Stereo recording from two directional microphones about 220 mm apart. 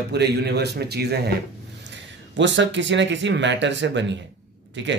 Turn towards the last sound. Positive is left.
turn(degrees=-55)  # may be behind; listen again after turning